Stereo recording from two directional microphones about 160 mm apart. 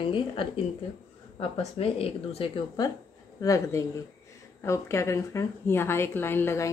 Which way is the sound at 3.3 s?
20° left (ahead or behind).